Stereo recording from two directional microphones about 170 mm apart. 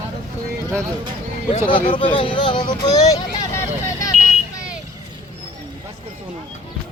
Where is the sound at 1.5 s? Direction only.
30° left (ahead or behind).